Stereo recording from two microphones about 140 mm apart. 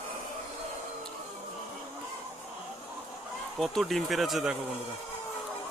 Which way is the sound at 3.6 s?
Centre (ahead or behind).